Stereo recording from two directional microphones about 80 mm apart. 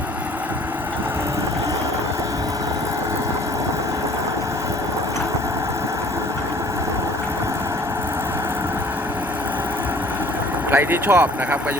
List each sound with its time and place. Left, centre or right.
10.7 s speech: right